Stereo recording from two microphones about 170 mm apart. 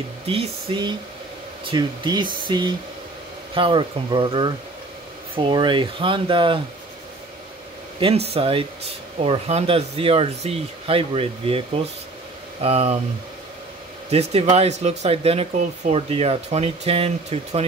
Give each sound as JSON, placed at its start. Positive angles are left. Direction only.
{"t": 0.3, "sound": "speech", "side_deg": -35}
{"t": 8.0, "sound": "speech", "side_deg": -35}
{"t": 14.1, "sound": "speech", "side_deg": -40}